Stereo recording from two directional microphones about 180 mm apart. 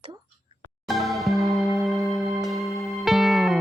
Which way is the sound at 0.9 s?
Centre (ahead or behind).